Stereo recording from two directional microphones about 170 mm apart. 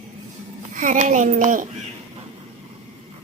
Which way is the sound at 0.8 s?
45° right (ahead or behind).